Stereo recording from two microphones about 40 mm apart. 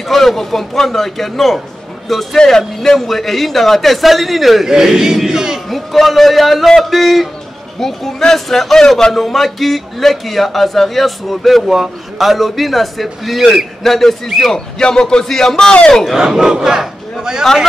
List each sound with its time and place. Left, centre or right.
0.1 s a man's voice: centre
4.6 s a man's voice: centre
5.7 s a man's voice: centre
14.5 s speech: centre
15.2 s speech: centre
15.5 s speech: left
15.9 s a man's voice: centre
16.2 s a man's voice: centre